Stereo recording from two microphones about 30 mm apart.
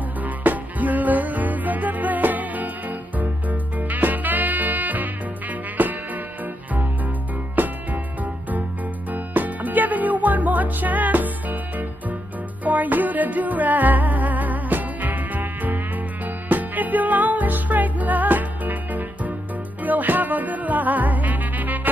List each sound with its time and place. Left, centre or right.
0.2 s music: right
7.5 s music: right
12.6 s music: right